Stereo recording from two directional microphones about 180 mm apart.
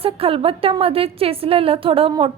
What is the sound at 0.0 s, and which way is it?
A woman's voice, 30° right (ahead or behind).